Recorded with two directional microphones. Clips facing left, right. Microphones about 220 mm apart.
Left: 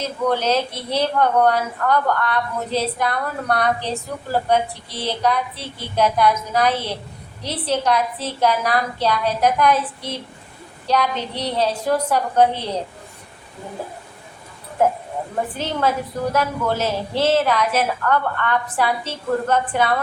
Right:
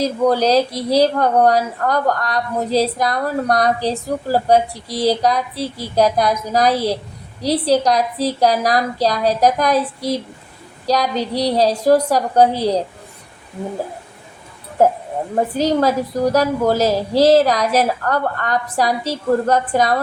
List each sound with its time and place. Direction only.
0.0 s speech: 35° right (ahead or behind)
14.8 s speech: 35° right (ahead or behind)